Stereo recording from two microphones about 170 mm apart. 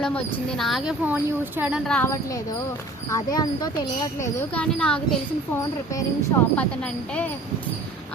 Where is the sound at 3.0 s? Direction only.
20° left (ahead or behind).